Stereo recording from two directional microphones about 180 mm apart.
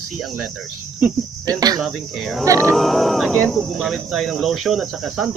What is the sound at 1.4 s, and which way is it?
Cricket, 20° right (ahead or behind).